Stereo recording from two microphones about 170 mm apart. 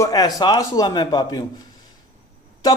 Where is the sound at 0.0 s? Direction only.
20° left (ahead or behind).